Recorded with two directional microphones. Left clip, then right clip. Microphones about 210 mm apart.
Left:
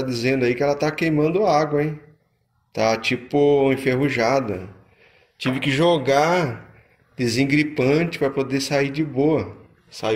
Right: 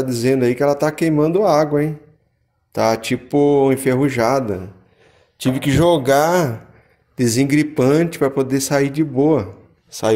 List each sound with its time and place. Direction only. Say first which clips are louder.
0.0 s speech: right 4 dB; 25° right (ahead or behind)